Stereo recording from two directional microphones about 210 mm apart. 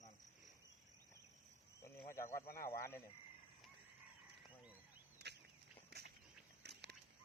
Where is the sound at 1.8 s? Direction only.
15° left (ahead or behind).